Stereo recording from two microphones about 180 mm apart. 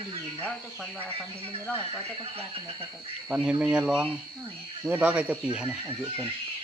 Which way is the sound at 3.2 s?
5° right (ahead or behind).